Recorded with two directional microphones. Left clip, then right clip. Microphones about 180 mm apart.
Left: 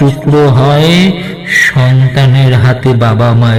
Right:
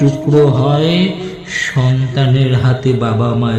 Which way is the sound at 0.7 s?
30° left (ahead or behind).